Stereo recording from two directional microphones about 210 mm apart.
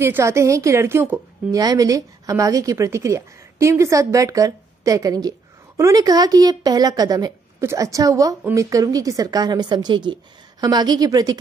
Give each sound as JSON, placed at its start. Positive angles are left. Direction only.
{"t": 0.0, "sound": "a woman's voice", "side_deg": -10}